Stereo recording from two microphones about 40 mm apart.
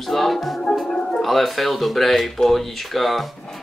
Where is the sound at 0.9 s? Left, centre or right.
Centre.